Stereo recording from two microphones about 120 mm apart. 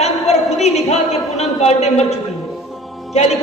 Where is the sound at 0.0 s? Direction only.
65° left (ahead or behind).